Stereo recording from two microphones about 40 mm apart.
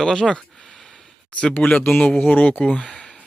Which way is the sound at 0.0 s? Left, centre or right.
Centre.